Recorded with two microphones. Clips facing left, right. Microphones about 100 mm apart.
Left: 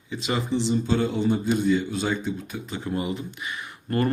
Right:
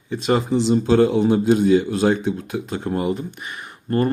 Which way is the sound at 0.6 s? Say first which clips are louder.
Right 9 dB; 90° right.